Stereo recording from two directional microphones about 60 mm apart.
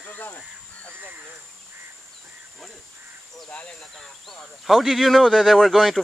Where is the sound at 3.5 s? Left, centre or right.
Left.